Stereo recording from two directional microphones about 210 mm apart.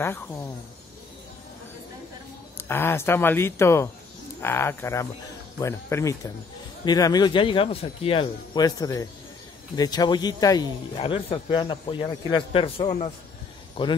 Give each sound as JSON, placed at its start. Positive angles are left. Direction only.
{"t": 0.0, "sound": "speech", "side_deg": 10}
{"t": 2.5, "sound": "speech", "side_deg": 10}